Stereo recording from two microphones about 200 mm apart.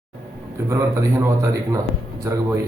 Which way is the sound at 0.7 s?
15° right (ahead or behind).